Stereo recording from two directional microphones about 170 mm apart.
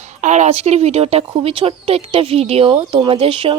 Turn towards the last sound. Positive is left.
turn(degrees=-30)  # may be behind; listen again after turning